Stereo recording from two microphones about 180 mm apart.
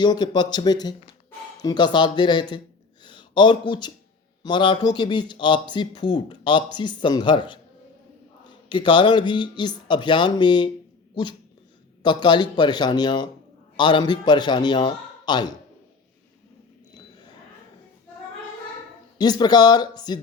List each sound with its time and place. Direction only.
0.0 s speech: 25° left (ahead or behind)
3.0 s a sound: 25° left (ahead or behind)
4.4 s speech: 25° left (ahead or behind)
12.0 s speech: 25° left (ahead or behind)
19.2 s speech: 25° left (ahead or behind)